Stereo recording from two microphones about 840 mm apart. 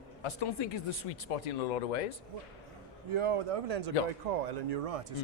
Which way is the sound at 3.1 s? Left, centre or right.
Right.